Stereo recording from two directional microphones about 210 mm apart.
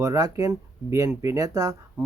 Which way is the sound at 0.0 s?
15° right (ahead or behind).